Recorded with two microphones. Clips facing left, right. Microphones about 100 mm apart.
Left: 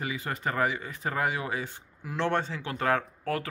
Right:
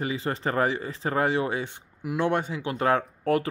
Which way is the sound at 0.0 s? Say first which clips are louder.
Right 4 dB; 30° right (ahead or behind).